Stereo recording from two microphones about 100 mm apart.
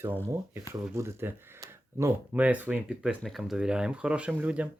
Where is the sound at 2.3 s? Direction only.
15° right (ahead or behind).